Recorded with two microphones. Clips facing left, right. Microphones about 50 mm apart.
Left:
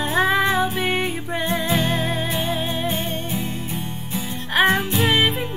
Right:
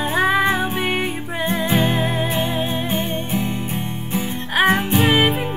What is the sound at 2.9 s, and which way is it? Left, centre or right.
Music, right.